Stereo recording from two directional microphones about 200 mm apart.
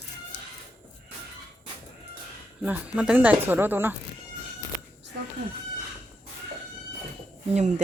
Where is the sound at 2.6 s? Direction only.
5° right (ahead or behind).